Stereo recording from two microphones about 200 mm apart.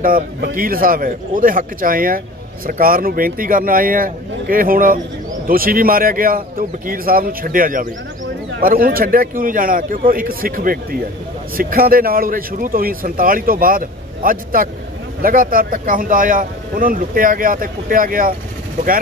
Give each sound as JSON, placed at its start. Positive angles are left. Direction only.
{"t": 0.0, "sound": "a man's voice", "side_deg": -45}